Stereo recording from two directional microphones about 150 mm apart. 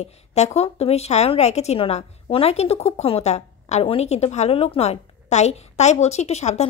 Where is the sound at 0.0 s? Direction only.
45° left (ahead or behind).